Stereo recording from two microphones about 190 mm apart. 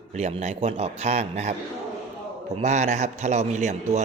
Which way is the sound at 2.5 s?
35° right (ahead or behind).